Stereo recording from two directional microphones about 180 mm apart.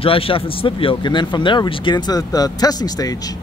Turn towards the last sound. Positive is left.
turn(degrees=20)  # may be behind; listen again after turning